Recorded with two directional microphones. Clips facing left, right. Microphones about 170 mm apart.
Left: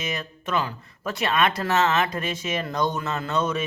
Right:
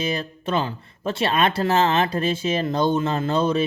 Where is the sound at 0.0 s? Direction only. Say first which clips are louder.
Right 5 dB; 30° right (ahead or behind).